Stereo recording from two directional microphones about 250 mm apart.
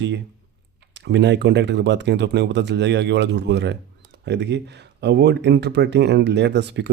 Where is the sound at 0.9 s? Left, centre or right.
Right.